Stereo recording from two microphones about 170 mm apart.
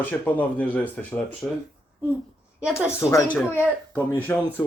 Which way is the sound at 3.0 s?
20° left (ahead or behind).